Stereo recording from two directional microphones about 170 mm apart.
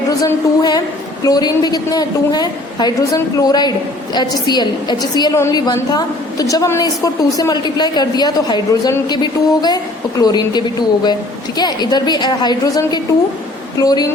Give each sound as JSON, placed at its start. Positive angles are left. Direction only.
{"t": 0.2, "sound": "a woman's voice", "side_deg": 20}